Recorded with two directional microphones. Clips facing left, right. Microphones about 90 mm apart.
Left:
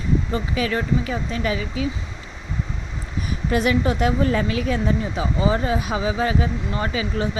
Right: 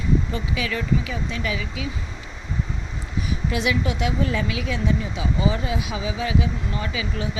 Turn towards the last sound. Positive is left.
turn(degrees=40)  # may be behind; listen again after turning